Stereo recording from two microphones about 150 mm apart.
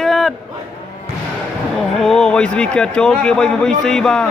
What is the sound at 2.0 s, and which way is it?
A man's voice, 5° left (ahead or behind).